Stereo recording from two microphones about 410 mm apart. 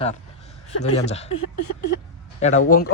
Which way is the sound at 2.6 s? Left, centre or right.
Left.